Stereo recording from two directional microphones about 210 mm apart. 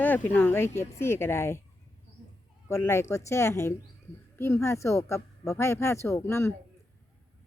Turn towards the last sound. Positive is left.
turn(degrees=10)  # may be behind; listen again after turning